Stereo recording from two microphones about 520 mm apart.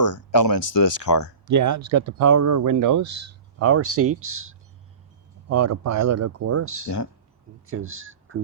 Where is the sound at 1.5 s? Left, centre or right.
Right.